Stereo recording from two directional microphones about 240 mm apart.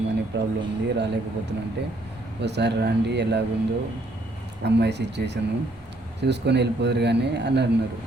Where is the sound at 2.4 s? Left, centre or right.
Right.